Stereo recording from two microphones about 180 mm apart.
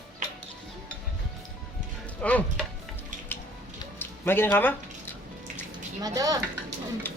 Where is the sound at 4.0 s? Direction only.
10° left (ahead or behind).